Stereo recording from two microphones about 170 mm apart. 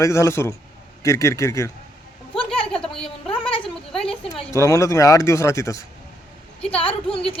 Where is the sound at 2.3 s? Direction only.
30° left (ahead or behind).